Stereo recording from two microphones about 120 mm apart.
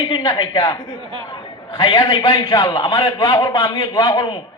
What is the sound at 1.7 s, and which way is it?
Speech, 50° left (ahead or behind).